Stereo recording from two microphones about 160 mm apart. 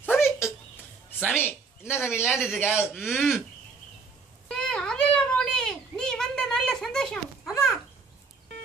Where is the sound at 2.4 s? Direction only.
15° left (ahead or behind).